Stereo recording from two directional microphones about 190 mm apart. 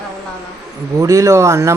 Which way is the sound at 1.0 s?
15° right (ahead or behind).